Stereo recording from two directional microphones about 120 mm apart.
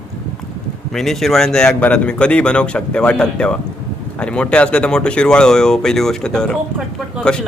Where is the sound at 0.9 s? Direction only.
5° left (ahead or behind).